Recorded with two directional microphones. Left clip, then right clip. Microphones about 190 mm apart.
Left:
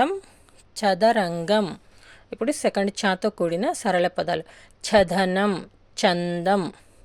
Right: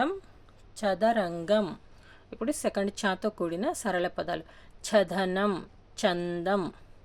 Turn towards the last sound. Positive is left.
turn(degrees=25)  # may be behind; listen again after turning